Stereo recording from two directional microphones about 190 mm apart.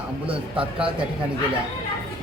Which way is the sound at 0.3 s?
30° right (ahead or behind).